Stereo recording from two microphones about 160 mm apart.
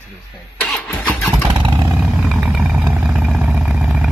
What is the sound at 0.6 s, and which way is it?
Speech, 5° left (ahead or behind).